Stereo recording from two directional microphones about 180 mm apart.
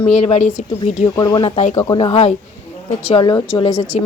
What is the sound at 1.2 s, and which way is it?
A woman's voice, 25° left (ahead or behind).